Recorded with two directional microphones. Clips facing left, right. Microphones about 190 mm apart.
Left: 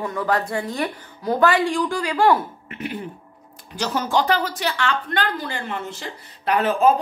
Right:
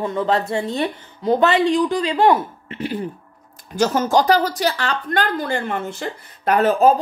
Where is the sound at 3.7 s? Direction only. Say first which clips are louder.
Right 5 dB; 45° right (ahead or behind).